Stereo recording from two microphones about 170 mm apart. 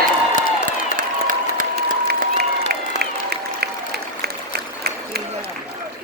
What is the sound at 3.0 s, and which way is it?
Applause, 70° right (ahead or behind).